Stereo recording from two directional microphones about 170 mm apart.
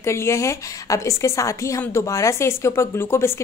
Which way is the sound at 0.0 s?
15° left (ahead or behind).